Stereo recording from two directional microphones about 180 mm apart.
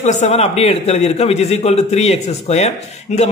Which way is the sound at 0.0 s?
40° left (ahead or behind).